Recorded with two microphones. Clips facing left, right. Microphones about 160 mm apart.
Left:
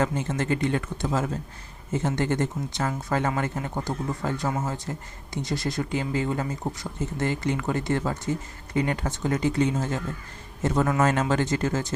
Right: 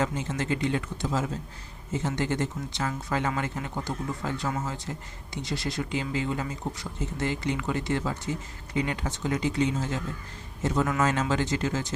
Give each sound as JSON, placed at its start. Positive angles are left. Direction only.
{"t": 0.0, "sound": "speech", "side_deg": 55}